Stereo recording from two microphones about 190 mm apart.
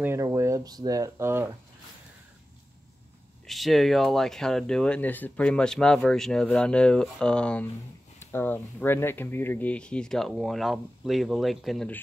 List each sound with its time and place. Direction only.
0.0 s speech: 15° right (ahead or behind)
3.4 s speech: centre (ahead or behind)